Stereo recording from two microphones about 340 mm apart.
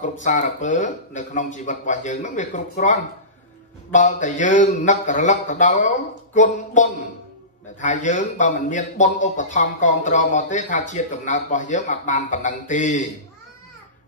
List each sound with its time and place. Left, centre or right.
0.0 s speech: left